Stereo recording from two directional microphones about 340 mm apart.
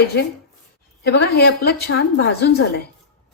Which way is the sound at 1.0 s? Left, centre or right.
Left.